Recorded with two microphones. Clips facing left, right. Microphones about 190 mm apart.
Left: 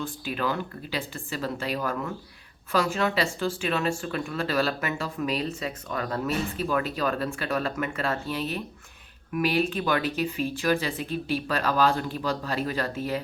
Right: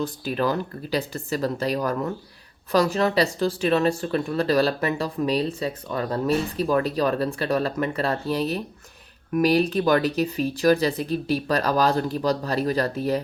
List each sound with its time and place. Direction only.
0.0 s speech: 40° right (ahead or behind)